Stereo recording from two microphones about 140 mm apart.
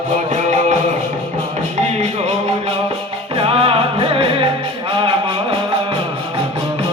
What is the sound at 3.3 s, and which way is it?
Music, 40° right (ahead or behind).